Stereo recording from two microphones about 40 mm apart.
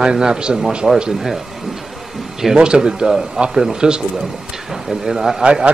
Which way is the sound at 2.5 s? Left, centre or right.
Right.